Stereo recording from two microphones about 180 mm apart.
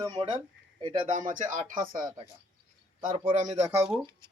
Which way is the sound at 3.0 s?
50° right (ahead or behind).